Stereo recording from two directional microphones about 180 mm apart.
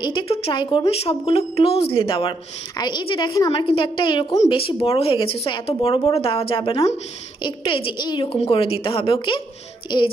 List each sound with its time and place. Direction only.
0.0 s a woman's voice: 25° left (ahead or behind)